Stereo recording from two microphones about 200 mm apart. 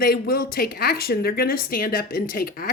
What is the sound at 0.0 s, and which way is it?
A woman's voice, 45° left (ahead or behind).